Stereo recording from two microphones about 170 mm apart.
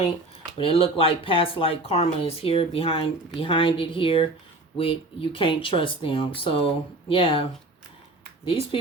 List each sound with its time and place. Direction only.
0.5 s speech: 35° left (ahead or behind)
8.4 s speech: 35° left (ahead or behind)